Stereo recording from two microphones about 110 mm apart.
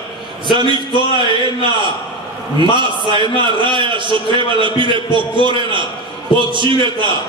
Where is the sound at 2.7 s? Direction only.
45° right (ahead or behind).